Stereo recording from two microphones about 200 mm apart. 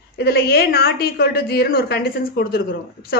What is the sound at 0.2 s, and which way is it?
A woman's voice, 55° left (ahead or behind).